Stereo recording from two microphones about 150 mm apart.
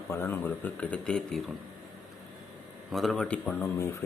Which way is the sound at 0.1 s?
15° left (ahead or behind).